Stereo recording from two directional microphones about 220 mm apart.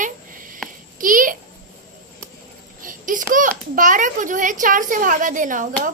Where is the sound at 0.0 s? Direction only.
40° right (ahead or behind).